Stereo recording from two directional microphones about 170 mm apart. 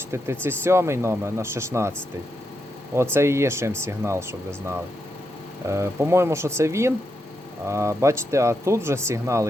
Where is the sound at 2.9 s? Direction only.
15° right (ahead or behind).